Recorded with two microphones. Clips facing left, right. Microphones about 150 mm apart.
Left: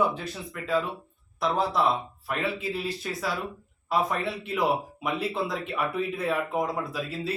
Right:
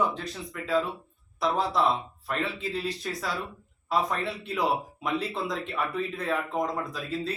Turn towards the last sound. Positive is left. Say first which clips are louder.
# even
turn(degrees=5)  # may be behind; listen again after turning